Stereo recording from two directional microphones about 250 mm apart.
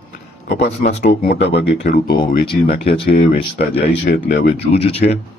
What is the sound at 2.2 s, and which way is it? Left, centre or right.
Speech, centre.